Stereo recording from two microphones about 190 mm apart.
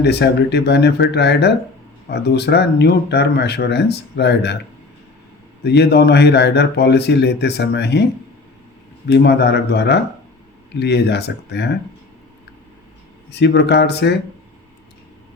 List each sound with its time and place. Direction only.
0.0 s speech: 60° left (ahead or behind)
5.6 s speech: 60° left (ahead or behind)
9.0 s speech: 60° left (ahead or behind)
13.3 s speech: 60° left (ahead or behind)